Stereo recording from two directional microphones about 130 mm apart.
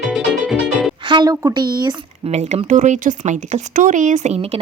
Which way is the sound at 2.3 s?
55° right (ahead or behind).